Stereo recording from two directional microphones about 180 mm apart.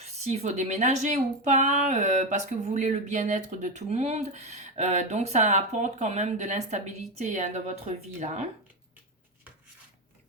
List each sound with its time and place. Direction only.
0.0 s speech: 40° right (ahead or behind)